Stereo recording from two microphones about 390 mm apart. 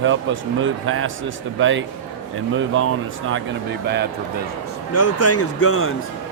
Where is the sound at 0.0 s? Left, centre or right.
Right.